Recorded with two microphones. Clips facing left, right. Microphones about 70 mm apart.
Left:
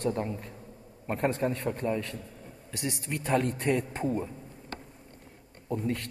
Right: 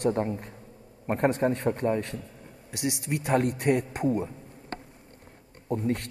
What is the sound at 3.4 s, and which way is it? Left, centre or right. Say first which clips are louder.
Speech: right 3 dB; right.